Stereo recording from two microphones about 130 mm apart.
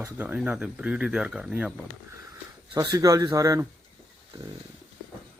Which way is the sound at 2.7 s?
30° right (ahead or behind).